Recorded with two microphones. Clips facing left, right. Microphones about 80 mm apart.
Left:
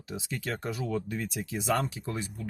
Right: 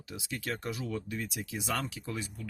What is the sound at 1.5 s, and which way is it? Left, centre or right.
Speech, left.